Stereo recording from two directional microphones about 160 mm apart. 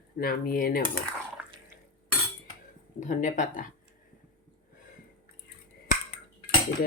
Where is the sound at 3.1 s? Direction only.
50° left (ahead or behind).